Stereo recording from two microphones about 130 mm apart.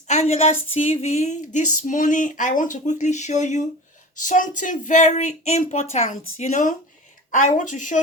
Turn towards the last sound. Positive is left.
turn(degrees=75)  # may be behind; listen again after turning